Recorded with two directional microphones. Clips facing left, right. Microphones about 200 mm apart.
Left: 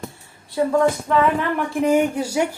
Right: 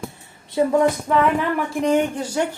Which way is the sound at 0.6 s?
20° right (ahead or behind).